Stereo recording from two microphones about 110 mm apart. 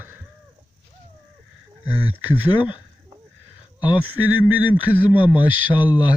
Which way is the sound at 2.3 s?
15° right (ahead or behind).